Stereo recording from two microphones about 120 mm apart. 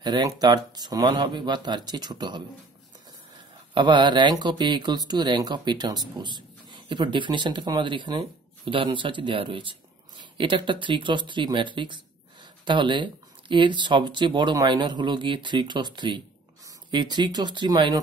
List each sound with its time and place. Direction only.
0.0 s speech: 35° right (ahead or behind)
3.7 s speech: 40° right (ahead or behind)